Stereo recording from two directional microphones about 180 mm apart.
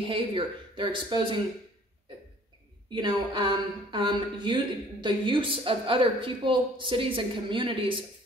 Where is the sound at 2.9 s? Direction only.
25° right (ahead or behind).